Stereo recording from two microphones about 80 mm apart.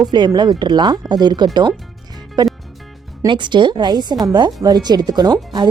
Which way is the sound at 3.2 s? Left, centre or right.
Right.